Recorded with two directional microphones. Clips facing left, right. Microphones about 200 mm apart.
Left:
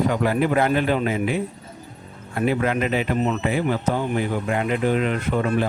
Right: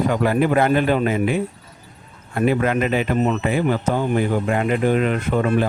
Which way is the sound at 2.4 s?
50° right (ahead or behind).